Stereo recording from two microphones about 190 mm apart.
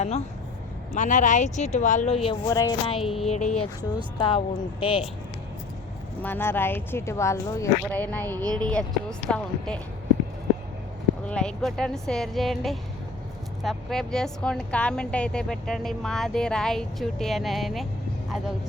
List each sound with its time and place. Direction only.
0.9 s speech: 40° left (ahead or behind)
2.2 s speech: 20° left (ahead or behind)
3.0 s speech: centre (ahead or behind)
3.2 s speech: 35° left (ahead or behind)
6.2 s speech: 10° left (ahead or behind)
11.3 s speech: 5° left (ahead or behind)